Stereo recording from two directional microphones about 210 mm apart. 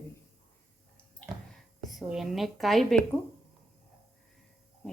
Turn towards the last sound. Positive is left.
turn(degrees=0)  # may be behind; listen again after turning